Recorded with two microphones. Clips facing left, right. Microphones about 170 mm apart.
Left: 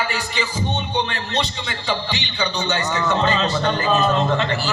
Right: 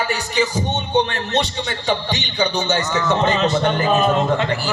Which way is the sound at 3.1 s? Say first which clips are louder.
Right 3 dB; 15° right (ahead or behind).